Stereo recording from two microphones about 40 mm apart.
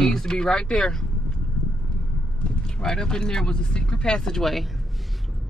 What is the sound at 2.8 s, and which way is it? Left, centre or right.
Speech, centre.